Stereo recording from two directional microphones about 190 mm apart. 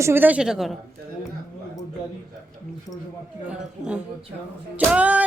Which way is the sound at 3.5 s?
5° right (ahead or behind).